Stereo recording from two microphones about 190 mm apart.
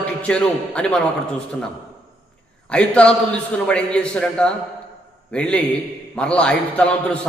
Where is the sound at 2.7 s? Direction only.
5° left (ahead or behind).